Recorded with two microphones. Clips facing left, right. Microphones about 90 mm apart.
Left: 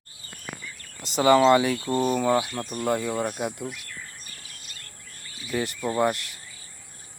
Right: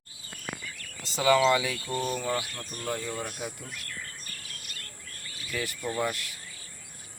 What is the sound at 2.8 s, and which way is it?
Speech, 60° left (ahead or behind).